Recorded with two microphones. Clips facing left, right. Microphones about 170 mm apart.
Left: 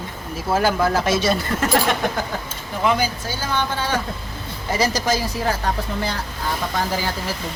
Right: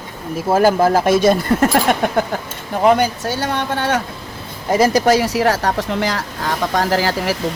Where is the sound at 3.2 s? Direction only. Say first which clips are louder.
Right 4 dB; 70° right (ahead or behind).